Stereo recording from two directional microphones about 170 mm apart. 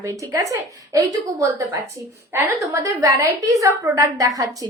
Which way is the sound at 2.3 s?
15° right (ahead or behind).